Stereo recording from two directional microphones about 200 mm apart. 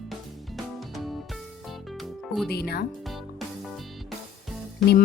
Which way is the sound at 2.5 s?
55° left (ahead or behind).